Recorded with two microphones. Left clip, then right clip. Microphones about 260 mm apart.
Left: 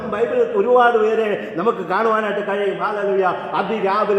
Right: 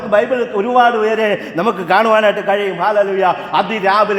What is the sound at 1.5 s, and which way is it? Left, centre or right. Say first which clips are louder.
A man's voice: right 6 dB; right.